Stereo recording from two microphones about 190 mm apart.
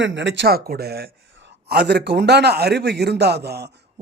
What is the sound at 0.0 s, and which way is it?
A man's voice, 70° right (ahead or behind).